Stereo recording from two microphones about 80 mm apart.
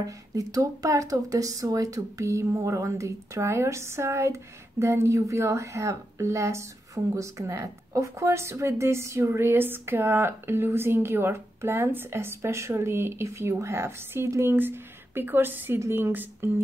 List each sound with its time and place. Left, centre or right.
0.0 s a woman's voice: right